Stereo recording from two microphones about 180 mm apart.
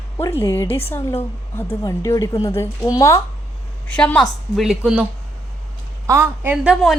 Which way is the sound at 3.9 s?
5° left (ahead or behind).